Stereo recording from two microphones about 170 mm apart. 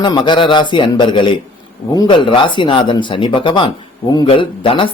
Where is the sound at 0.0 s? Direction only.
25° left (ahead or behind).